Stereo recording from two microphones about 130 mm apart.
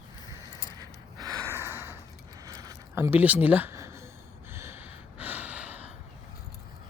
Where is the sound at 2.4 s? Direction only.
30° right (ahead or behind).